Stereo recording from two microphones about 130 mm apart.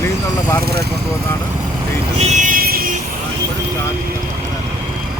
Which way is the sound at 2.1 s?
60° right (ahead or behind).